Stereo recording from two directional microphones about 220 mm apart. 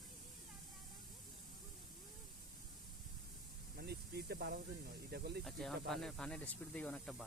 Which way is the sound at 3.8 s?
45° right (ahead or behind).